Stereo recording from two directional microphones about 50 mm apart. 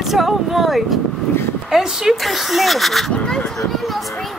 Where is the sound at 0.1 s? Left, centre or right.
Centre.